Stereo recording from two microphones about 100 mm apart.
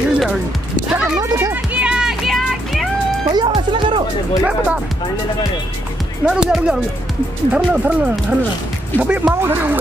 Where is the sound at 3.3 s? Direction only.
55° right (ahead or behind).